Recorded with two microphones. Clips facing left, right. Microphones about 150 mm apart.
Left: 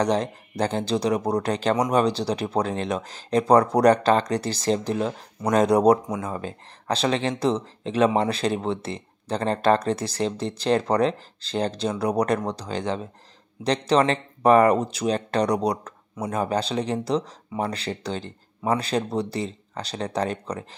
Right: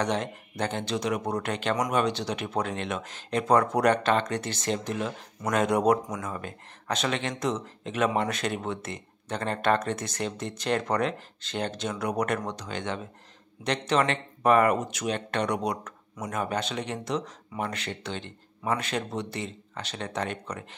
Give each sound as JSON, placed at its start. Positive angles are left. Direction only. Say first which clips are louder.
{"t": 0.0, "sound": "speech", "louder": "left 5 dB", "side_deg": 35}